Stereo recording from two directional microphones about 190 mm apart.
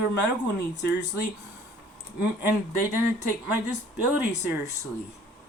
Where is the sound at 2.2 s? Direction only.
10° right (ahead or behind).